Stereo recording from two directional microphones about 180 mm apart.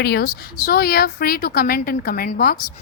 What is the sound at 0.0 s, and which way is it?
A woman's voice, 60° left (ahead or behind).